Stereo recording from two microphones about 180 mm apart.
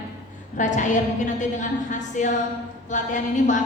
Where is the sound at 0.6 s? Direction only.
45° left (ahead or behind).